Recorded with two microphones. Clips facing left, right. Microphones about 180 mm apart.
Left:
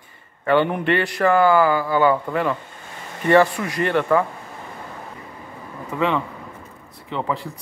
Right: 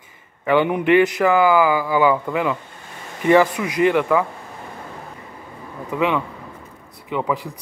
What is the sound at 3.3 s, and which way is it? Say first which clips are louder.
A man's voice: right 1 dB; 10° right (ahead or behind).